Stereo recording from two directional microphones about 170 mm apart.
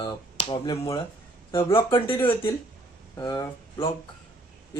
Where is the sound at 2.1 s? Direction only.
10° left (ahead or behind).